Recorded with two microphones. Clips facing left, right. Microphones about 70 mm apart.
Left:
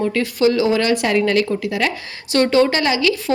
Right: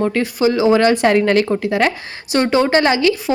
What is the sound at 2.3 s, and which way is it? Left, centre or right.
Speech, right.